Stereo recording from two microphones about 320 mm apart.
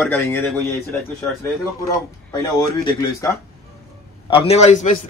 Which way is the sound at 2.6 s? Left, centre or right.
Centre.